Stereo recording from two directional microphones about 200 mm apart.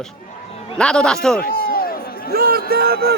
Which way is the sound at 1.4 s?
50° left (ahead or behind).